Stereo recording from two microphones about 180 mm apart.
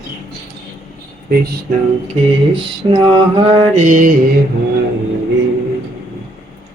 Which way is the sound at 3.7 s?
45° right (ahead or behind).